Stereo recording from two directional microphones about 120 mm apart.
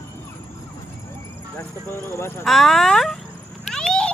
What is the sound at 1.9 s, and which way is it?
Speech, 20° left (ahead or behind).